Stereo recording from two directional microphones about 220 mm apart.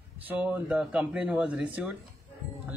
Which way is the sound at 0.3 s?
5° right (ahead or behind).